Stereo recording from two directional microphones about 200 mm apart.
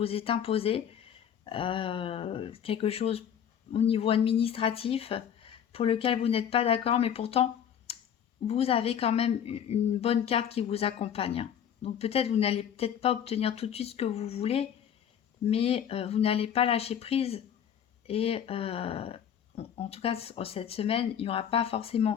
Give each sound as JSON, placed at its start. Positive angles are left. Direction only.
{"t": 0.0, "sound": "speech", "side_deg": 30}
{"t": 8.4, "sound": "speech", "side_deg": 30}